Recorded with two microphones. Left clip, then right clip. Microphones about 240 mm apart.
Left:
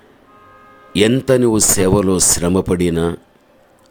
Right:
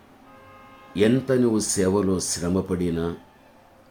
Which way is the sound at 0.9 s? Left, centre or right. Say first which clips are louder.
Left 7 dB; left.